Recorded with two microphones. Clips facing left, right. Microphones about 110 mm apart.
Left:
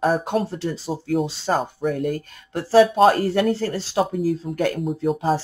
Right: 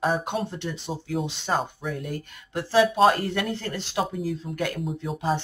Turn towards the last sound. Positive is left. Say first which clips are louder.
# left 6 dB
turn(degrees=40)  # may be behind; listen again after turning